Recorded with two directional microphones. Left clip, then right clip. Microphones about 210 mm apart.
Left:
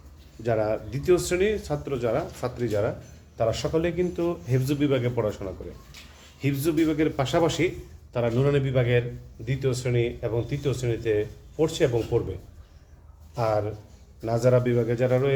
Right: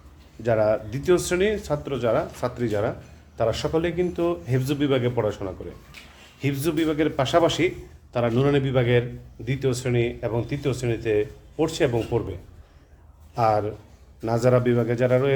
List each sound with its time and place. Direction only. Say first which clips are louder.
0.4 s a man's voice: right 4 dB; 15° right (ahead or behind)